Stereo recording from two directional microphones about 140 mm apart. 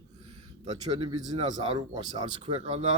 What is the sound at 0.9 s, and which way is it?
Speech, 40° right (ahead or behind).